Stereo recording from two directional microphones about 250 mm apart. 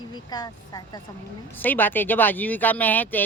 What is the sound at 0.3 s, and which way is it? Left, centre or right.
A man's voice, centre.